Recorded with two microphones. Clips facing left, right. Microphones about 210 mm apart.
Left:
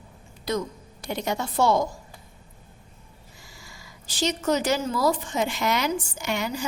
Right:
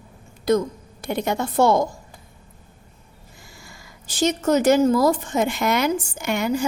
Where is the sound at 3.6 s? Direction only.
55° right (ahead or behind).